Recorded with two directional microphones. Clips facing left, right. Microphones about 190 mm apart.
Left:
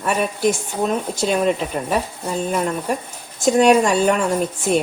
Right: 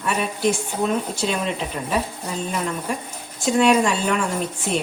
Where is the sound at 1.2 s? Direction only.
45° left (ahead or behind).